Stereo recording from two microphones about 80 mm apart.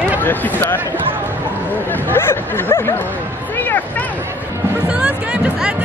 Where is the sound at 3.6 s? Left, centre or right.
Left.